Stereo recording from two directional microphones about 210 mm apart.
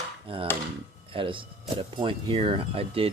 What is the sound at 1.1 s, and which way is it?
Speech, 25° right (ahead or behind).